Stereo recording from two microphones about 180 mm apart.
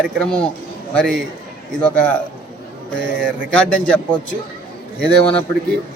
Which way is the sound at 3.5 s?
5° left (ahead or behind).